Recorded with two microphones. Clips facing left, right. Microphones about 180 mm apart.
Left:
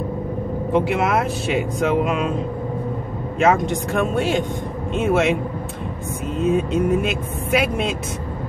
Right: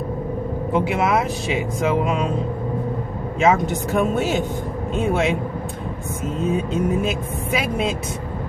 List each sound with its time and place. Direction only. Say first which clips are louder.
0.7 s speech: left 1 dB; centre (ahead or behind)
3.3 s speech: even; centre (ahead or behind)
6.3 s speech: left 3 dB; centre (ahead or behind)